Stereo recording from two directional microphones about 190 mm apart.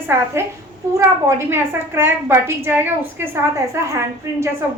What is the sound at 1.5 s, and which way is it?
A woman's voice, 10° right (ahead or behind).